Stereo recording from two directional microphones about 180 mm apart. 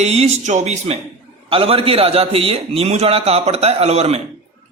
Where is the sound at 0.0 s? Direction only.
35° right (ahead or behind).